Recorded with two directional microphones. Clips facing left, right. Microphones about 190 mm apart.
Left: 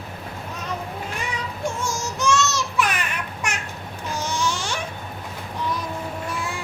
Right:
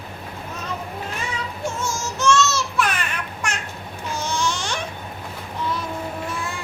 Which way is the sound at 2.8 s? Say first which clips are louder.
Left 1 dB; 10° left (ahead or behind).